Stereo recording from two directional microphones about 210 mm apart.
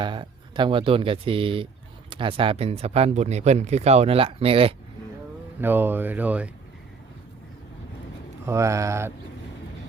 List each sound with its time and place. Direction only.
0.0 s speech: 20° right (ahead or behind)
5.5 s speech: 10° right (ahead or behind)
8.4 s speech: 15° right (ahead or behind)